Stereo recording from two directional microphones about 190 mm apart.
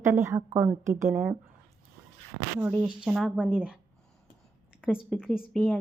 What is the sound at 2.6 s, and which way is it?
Speech, 5° right (ahead or behind).